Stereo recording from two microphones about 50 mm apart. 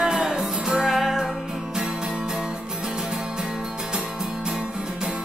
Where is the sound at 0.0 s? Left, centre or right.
Centre.